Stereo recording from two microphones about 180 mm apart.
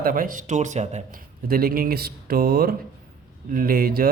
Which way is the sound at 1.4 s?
55° right (ahead or behind).